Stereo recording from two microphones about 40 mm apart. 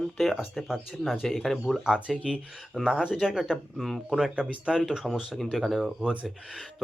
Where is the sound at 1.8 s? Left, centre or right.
Centre.